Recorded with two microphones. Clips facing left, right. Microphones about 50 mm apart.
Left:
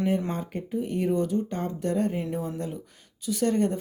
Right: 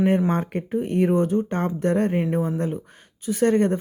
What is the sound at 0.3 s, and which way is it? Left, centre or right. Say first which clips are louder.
Speech: right 7 dB; right.